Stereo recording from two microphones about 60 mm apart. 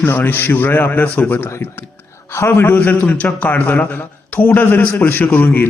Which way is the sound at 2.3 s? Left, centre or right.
Left.